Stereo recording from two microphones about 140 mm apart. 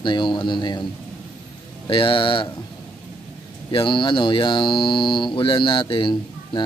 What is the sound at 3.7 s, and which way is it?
Speech, 35° left (ahead or behind).